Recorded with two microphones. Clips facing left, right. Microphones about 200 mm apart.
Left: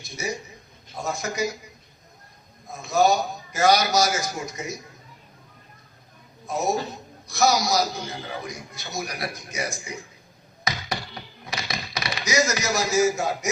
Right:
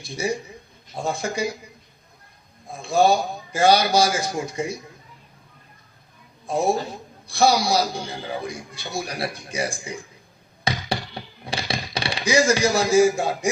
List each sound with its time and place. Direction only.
0.0 s a man's voice: 30° right (ahead or behind)
2.6 s a man's voice: 30° right (ahead or behind)
6.5 s a man's voice: 30° right (ahead or behind)
10.6 s thunk: 30° right (ahead or behind)